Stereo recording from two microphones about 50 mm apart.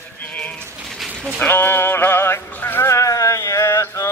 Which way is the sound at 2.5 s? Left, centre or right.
Left.